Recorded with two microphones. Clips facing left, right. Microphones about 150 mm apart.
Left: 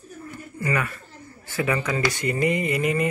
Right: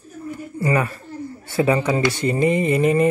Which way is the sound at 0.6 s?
35° right (ahead or behind).